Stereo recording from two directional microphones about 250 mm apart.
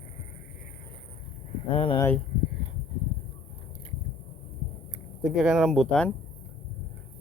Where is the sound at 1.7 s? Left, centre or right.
Left.